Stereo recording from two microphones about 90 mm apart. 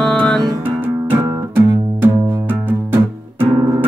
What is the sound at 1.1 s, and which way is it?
Music, 20° right (ahead or behind).